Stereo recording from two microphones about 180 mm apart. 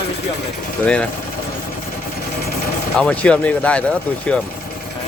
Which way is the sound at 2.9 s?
5° left (ahead or behind).